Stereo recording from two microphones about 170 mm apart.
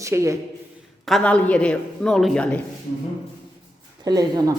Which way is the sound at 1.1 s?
5° left (ahead or behind).